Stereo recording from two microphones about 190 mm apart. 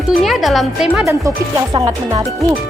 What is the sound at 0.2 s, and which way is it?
Speech, centre (ahead or behind).